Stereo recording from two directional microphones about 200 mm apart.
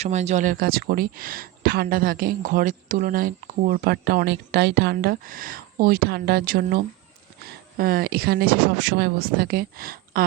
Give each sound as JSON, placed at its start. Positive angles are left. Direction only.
{"t": 0.0, "sound": "speech", "side_deg": -35}